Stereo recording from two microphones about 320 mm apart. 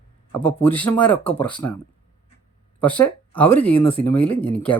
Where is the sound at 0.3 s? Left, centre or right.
Centre.